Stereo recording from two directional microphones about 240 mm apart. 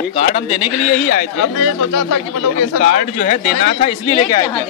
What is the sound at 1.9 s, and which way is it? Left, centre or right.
Speech, left.